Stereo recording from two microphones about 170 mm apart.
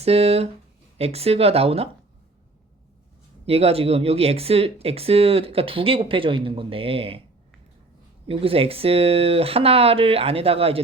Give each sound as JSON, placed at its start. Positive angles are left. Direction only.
{"t": 0.0, "sound": "speech", "side_deg": -35}
{"t": 3.4, "sound": "speech", "side_deg": -35}
{"t": 8.3, "sound": "speech", "side_deg": -35}